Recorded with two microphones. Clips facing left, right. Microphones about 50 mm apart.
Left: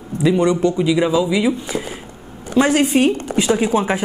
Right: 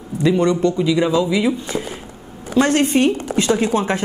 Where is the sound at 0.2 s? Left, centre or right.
Centre.